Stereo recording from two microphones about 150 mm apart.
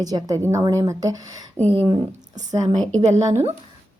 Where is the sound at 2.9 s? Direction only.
45° right (ahead or behind).